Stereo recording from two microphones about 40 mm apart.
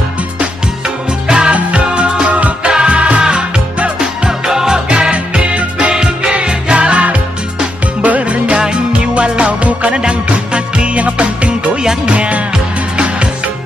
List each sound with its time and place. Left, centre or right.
1.2 s music: centre
1.5 s music: right; by 4.8 s centre
4.8 s music: right